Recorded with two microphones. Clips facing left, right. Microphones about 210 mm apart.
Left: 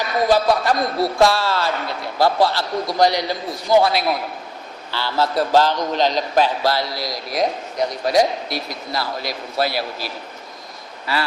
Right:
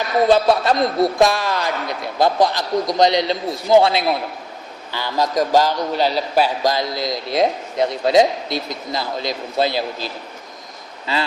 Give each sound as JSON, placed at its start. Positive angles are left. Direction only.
{"t": 0.3, "sound": "a man's voice", "side_deg": -20}